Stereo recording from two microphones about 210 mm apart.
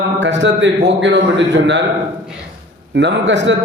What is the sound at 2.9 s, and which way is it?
Speech, 60° right (ahead or behind).